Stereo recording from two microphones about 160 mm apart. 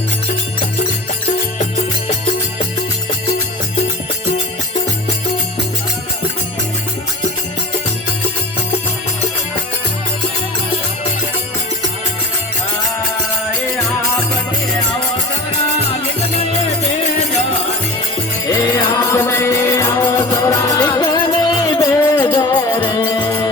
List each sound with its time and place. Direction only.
18.4 s music: 20° left (ahead or behind)